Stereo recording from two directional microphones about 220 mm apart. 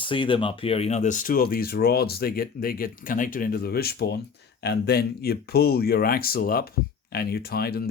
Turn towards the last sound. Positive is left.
turn(degrees=45)  # may be behind; listen again after turning